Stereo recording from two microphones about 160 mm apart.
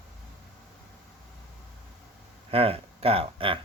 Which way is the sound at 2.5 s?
35° right (ahead or behind).